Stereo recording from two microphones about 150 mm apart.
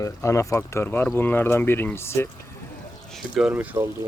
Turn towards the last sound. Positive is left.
turn(degrees=-10)  # may be behind; listen again after turning